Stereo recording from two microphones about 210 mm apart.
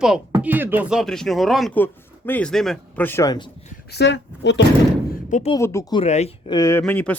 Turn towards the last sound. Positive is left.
turn(degrees=5)  # may be behind; listen again after turning